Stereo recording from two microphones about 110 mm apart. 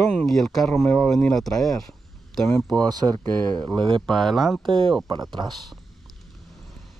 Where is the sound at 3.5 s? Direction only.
45° right (ahead or behind).